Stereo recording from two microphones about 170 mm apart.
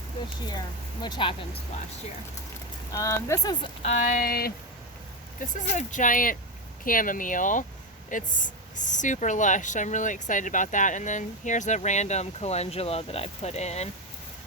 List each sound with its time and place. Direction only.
1.0 s speech: 25° left (ahead or behind)
2.9 s speech: 20° left (ahead or behind)
3.8 s speech: 55° left (ahead or behind)
5.4 s speech: 45° left (ahead or behind)